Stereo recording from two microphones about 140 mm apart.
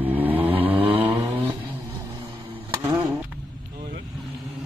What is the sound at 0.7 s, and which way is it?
Vehicle, 40° right (ahead or behind).